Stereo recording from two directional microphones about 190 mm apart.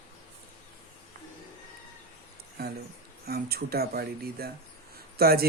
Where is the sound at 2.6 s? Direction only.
55° right (ahead or behind).